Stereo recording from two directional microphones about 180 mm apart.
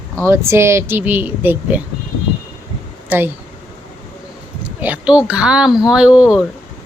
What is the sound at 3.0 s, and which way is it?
Speech, 10° right (ahead or behind).